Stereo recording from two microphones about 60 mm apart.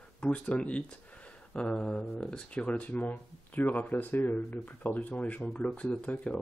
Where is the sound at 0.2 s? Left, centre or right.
Centre.